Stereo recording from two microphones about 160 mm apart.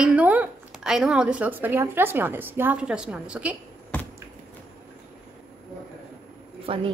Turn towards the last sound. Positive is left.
turn(degrees=-35)  # may be behind; listen again after turning